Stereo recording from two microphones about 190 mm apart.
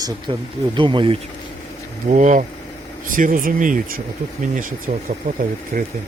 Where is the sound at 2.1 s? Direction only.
40° right (ahead or behind).